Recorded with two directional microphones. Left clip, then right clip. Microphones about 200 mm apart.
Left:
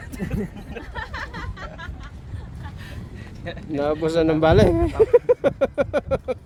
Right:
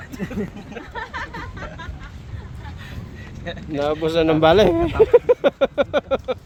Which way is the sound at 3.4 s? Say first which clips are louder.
Right 1 dB; 5° left (ahead or behind).